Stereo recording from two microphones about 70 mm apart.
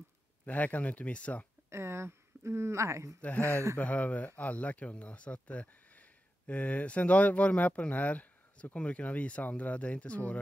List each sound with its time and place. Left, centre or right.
0.5 s speech: left
1.7 s speech: right
3.2 s speech: left
3.4 s speech: right
3.7 s speech: left